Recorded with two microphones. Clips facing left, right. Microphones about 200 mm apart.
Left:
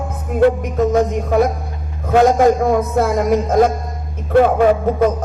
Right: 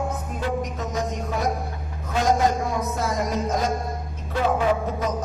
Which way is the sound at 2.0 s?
55° left (ahead or behind).